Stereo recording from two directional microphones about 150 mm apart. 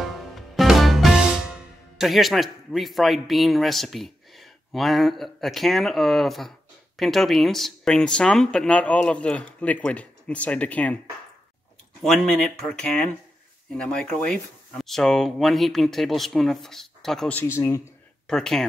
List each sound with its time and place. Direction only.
0.0 s music: centre (ahead or behind)
7.0 s speech: centre (ahead or behind)
12.0 s speech: centre (ahead or behind)
17.6 s speech: 20° left (ahead or behind)
18.2 s speech: 5° left (ahead or behind)